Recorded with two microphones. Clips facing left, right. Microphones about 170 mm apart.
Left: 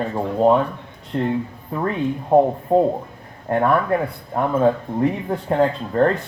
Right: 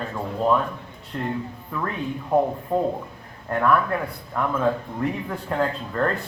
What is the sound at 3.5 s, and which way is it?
Speech, 30° left (ahead or behind).